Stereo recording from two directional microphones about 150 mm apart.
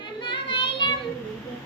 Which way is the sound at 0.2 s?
35° left (ahead or behind).